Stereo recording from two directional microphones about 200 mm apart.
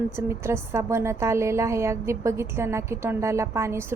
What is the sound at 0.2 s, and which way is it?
Speech, 15° right (ahead or behind).